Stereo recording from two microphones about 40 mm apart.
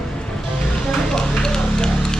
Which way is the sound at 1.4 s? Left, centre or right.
Centre.